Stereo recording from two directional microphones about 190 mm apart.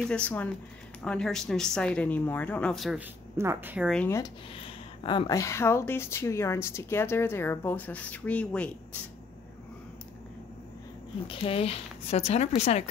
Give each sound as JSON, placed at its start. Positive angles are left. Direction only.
{"t": 0.0, "sound": "speech", "side_deg": 5}
{"t": 3.3, "sound": "a woman's voice", "side_deg": -10}
{"t": 3.9, "sound": "speech", "side_deg": 5}
{"t": 4.2, "sound": "speech", "side_deg": 25}
{"t": 11.2, "sound": "speech", "side_deg": 30}